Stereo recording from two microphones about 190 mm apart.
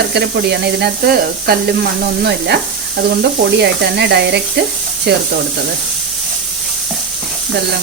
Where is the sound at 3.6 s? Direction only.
60° right (ahead or behind).